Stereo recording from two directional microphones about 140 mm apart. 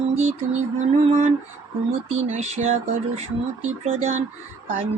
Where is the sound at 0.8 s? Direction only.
55° right (ahead or behind).